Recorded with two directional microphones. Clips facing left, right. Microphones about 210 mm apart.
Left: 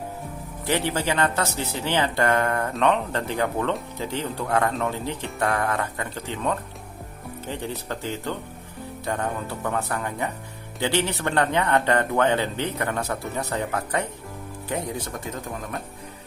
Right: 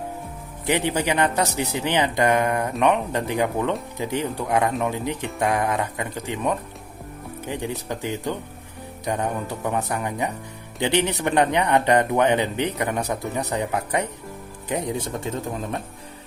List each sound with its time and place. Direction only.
0.6 s speech: 15° right (ahead or behind)